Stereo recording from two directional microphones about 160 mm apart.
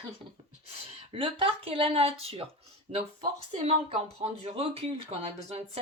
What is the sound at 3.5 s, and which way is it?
A woman's voice, 40° right (ahead or behind).